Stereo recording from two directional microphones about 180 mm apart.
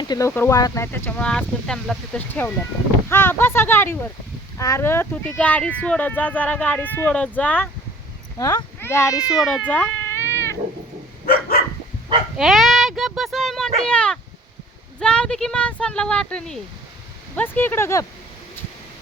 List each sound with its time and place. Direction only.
0.0 s speech: 20° left (ahead or behind)
8.4 s speech: 20° left (ahead or behind)
9.1 s speech: 5° right (ahead or behind); by 10.6 s 15° left (ahead or behind)
11.3 s dog: 60° left (ahead or behind)
12.4 s speech: centre (ahead or behind); by 18.0 s 15° left (ahead or behind)